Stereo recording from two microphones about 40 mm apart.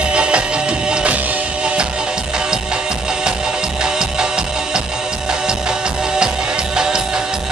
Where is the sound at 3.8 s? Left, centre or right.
Centre.